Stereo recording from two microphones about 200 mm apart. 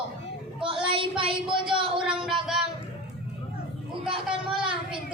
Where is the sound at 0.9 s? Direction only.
25° right (ahead or behind).